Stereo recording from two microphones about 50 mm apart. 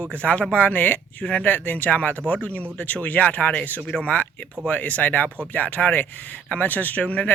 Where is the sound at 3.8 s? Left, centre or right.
Centre.